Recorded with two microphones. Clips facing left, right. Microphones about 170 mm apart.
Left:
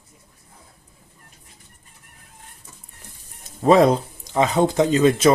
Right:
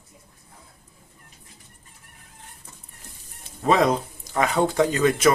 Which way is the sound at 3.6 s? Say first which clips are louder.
Left 5 dB; 35° left (ahead or behind).